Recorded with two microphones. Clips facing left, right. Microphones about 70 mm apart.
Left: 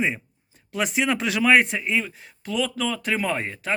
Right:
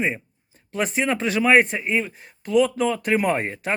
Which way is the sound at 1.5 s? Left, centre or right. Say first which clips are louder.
Right 2 dB; centre.